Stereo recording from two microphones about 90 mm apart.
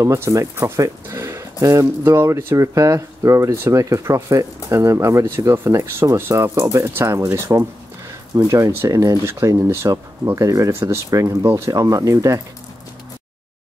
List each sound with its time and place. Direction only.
0.0 s speech: 35° right (ahead or behind)
10.7 s speech: 25° right (ahead or behind)